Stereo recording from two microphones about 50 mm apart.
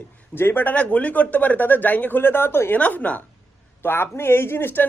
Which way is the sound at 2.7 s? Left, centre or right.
Left.